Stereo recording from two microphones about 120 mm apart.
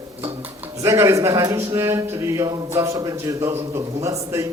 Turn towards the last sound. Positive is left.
turn(degrees=-25)  # may be behind; listen again after turning